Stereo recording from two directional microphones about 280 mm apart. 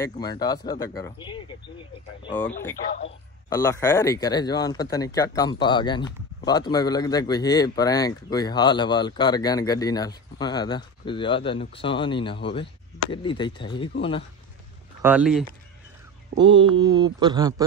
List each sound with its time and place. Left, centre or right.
0.0 s speech: centre
15.0 s speech: centre
16.3 s mantra: centre